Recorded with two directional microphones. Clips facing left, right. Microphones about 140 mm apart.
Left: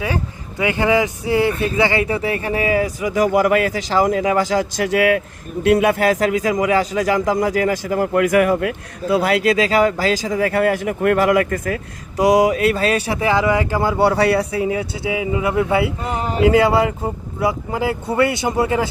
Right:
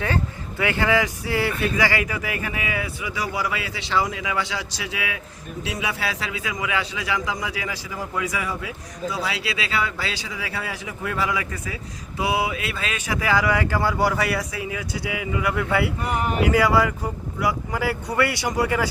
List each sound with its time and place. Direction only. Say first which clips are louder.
0.6 s a man's voice: left 5 dB; 20° left (ahead or behind)